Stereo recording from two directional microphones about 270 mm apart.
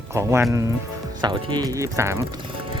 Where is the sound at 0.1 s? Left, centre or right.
Centre.